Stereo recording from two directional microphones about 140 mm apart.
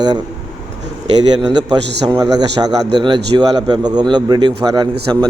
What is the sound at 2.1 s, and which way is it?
A man's voice, 25° right (ahead or behind).